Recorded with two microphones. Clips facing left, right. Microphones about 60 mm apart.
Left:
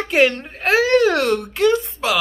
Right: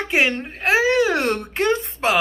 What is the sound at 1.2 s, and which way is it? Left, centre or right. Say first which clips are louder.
Speech: left 4 dB; right.